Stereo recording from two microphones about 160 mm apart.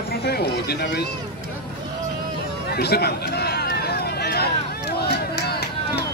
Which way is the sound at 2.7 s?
90° left.